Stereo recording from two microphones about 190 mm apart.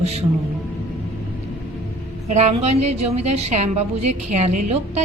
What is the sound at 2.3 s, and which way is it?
A woman's voice, 35° right (ahead or behind).